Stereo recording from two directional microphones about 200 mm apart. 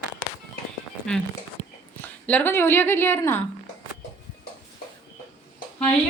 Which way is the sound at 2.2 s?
10° left (ahead or behind).